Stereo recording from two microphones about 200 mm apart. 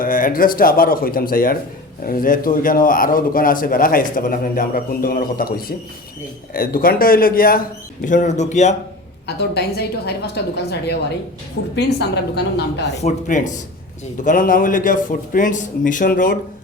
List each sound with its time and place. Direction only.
0.0 s a man's voice: 45° left (ahead or behind)
9.2 s a woman's voice: 55° left (ahead or behind)
13.1 s a man's voice: 40° left (ahead or behind)